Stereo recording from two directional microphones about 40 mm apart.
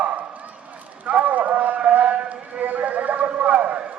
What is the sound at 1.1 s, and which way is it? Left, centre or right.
Clip-clop, right.